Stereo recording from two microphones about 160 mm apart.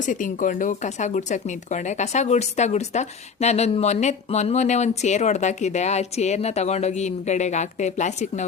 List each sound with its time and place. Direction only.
0.0 s speech: 55° left (ahead or behind)